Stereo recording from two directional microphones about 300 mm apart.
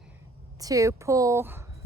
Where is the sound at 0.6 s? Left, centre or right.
Centre.